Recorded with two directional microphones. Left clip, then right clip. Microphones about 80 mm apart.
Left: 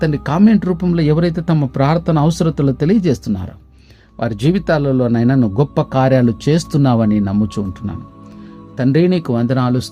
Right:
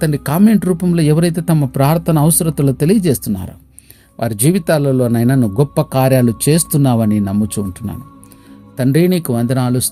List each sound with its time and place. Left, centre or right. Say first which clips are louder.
0.0 s speech: even; right
0.6 s speech: right 1 dB; right
3.0 s speech: right 1 dB; right
6.7 s speech: even; centre
8.7 s speech: even; right